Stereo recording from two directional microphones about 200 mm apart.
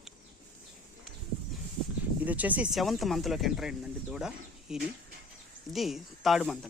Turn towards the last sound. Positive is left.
turn(degrees=0)  # may be behind; listen again after turning